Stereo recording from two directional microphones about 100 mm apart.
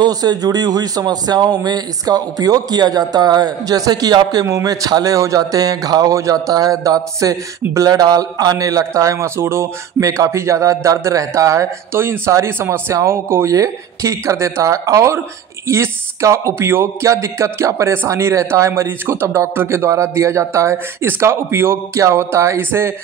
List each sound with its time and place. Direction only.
0.0 s speech: 40° right (ahead or behind); by 22.9 s 25° right (ahead or behind)